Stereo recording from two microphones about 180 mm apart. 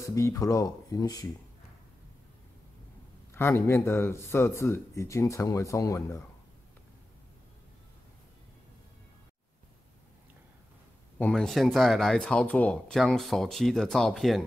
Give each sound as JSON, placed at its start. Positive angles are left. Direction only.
{"t": 0.0, "sound": "speech", "side_deg": 15}
{"t": 3.3, "sound": "speech", "side_deg": 15}
{"t": 11.1, "sound": "speech", "side_deg": 5}